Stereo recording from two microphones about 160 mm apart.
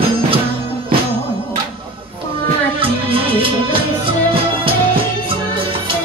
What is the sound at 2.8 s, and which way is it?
Music, 35° right (ahead or behind).